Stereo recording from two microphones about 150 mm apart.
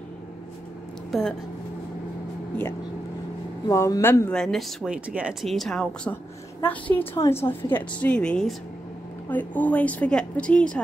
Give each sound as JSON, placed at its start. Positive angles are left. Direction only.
{"t": 1.1, "sound": "a woman's voice", "side_deg": 0}
{"t": 3.6, "sound": "speech", "side_deg": 20}
{"t": 4.4, "sound": "a woman's voice", "side_deg": 0}